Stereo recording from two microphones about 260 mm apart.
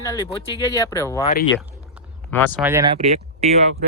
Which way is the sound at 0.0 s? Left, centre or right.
Centre.